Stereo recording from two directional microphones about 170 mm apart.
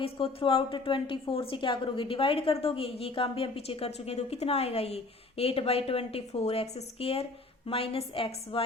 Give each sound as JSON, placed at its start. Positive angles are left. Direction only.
{"t": 0.0, "sound": "a woman's voice", "side_deg": 30}